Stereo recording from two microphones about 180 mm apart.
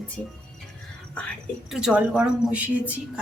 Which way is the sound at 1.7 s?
5° right (ahead or behind).